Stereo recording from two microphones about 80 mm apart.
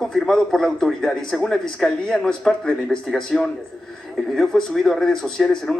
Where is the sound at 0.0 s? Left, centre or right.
Centre.